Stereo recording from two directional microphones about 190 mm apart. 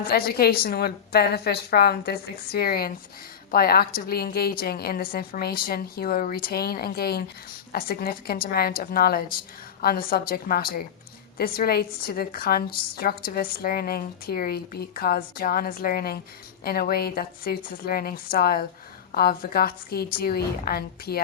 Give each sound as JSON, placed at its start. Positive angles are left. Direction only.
{"t": 0.1, "sound": "a woman's voice", "side_deg": 55}